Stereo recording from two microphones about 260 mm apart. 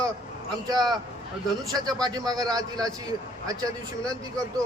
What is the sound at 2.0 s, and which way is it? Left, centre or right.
Speech, centre.